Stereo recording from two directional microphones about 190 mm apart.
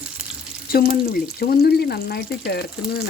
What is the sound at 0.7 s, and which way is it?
Speech, 50° left (ahead or behind).